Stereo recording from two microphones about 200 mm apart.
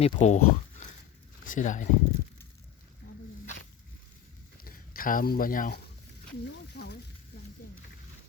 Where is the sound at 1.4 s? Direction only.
40° left (ahead or behind).